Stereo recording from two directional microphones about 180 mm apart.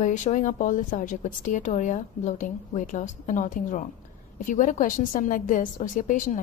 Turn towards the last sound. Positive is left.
turn(degrees=45)  # may be behind; listen again after turning